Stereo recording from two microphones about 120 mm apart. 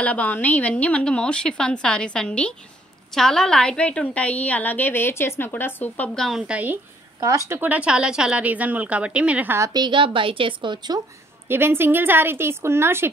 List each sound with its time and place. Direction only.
0.0 s a woman's voice: 15° left (ahead or behind); by 6.8 s 10° right (ahead or behind)
7.2 s a woman's voice: 25° right (ahead or behind)
9.6 s a woman's voice: 35° right (ahead or behind)
11.4 s a woman's voice: 20° right (ahead or behind)